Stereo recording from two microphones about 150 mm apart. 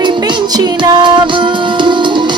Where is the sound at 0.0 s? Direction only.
30° right (ahead or behind).